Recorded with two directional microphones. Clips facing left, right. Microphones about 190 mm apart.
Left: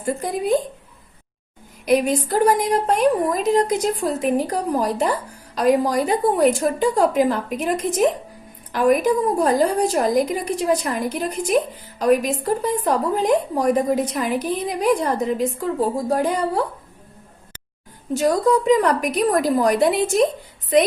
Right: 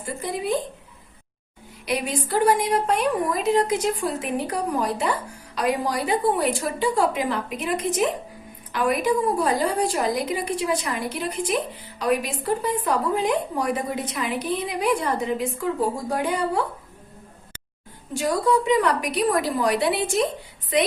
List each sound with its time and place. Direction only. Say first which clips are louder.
0.0 s a woman's voice: left 5 dB; 45° left (ahead or behind)
1.8 s a woman's voice: left 8 dB; 45° left (ahead or behind)
18.2 s a woman's voice: left 4 dB; 40° left (ahead or behind)